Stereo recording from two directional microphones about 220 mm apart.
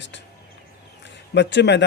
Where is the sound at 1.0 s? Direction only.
55° left (ahead or behind).